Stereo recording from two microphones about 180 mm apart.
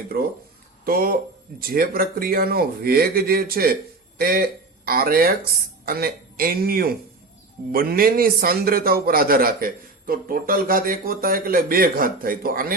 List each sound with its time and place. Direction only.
0.1 s a man's voice: 55° right (ahead or behind)